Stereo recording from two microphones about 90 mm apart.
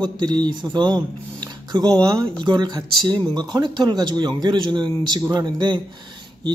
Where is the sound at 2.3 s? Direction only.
55° right (ahead or behind).